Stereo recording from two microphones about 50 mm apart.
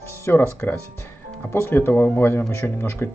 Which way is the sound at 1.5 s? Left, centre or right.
Left.